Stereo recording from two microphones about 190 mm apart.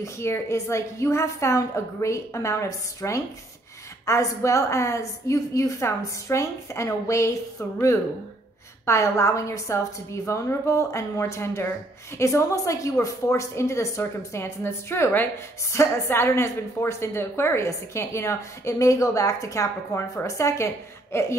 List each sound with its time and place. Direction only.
0.0 s a woman's voice: 15° left (ahead or behind)
8.8 s a woman's voice: 15° left (ahead or behind)